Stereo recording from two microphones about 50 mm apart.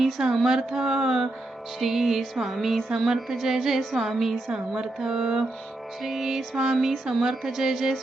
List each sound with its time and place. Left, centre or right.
0.0 s a sound: centre
0.4 s speech: centre
1.8 s music: centre
3.2 s speech: centre
4.1 s music: centre
4.5 s speech: centre